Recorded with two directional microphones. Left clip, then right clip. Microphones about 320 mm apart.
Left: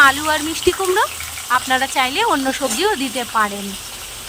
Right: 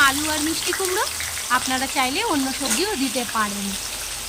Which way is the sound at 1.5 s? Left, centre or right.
Centre.